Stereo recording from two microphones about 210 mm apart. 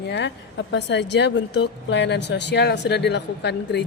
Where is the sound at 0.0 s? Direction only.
55° left (ahead or behind).